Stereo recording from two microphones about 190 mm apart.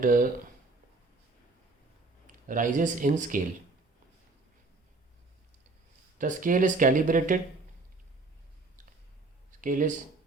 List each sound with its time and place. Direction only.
0.0 s speech: 45° right (ahead or behind)
2.2 s speech: 45° right (ahead or behind)
6.1 s speech: 45° right (ahead or behind)
9.5 s speech: 45° right (ahead or behind)